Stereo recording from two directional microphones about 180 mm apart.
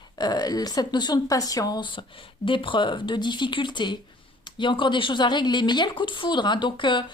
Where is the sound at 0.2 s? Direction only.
20° left (ahead or behind).